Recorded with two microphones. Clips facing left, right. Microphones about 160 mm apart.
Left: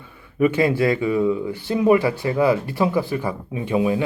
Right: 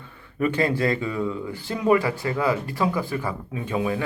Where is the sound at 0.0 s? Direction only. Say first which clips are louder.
Left 6 dB; 10° left (ahead or behind).